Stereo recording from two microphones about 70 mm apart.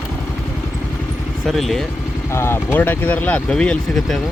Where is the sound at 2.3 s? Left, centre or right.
Left; by 3.8 s centre.